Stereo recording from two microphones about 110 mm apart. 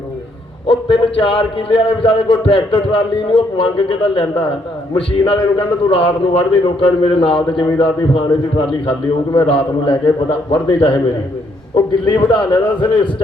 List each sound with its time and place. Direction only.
0.7 s a man's voice: 55° left (ahead or behind)
12.0 s a man's voice: 50° left (ahead or behind)